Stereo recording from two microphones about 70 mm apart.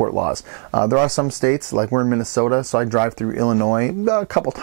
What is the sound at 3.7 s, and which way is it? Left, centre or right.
Speech, centre.